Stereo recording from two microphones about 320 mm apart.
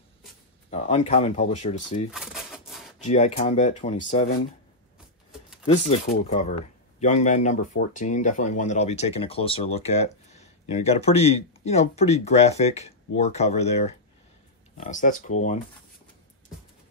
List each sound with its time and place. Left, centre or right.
0.7 s speech: left
2.1 s typewriter: centre
3.0 s speech: left
5.9 s speech: left